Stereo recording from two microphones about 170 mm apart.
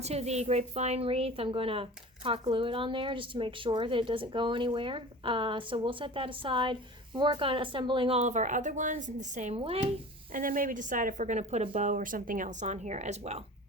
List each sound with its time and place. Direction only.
0.0 s a woman's voice: 40° right (ahead or behind)
10.3 s speech: 55° right (ahead or behind)